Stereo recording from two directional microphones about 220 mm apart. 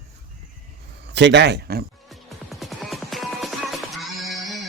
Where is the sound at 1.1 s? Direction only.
50° right (ahead or behind).